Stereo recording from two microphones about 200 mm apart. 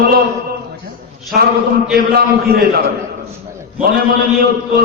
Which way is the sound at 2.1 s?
50° right (ahead or behind).